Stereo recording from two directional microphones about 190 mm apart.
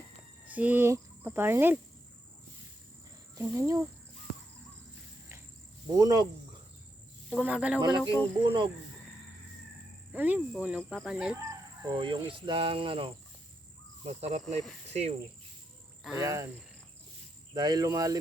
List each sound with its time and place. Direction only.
0.4 s speech: 10° right (ahead or behind)
3.3 s speech: 15° right (ahead or behind)
6.0 s speech: 20° right (ahead or behind)
7.3 s speech: 5° right (ahead or behind)
7.8 s speech: 20° right (ahead or behind)
10.1 s insect: 10° right (ahead or behind)
10.5 s speech: 5° right (ahead or behind)
11.8 s speech: 25° right (ahead or behind)
16.2 s speech: 15° right (ahead or behind)
17.5 s speech: 20° right (ahead or behind)